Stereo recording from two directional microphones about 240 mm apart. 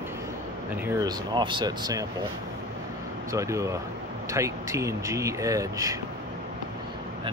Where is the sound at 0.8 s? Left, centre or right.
Centre.